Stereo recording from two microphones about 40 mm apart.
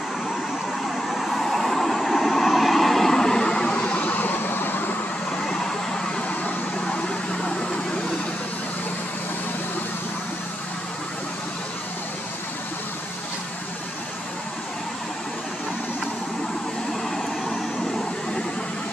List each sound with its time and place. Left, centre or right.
1.0 s vehicle: centre; by 4.1 s left
4.1 s vehicle: left
5.4 s vehicle: centre